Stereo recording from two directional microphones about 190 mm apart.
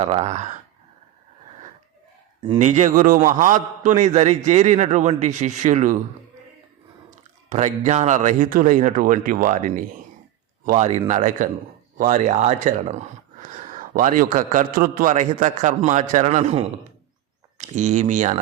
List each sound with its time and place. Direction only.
0.0 s speech: 35° right (ahead or behind)
2.6 s speech: 40° right (ahead or behind)
7.5 s a man's voice: 40° right (ahead or behind)